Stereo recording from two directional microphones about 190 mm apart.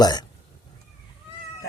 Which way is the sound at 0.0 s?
20° left (ahead or behind).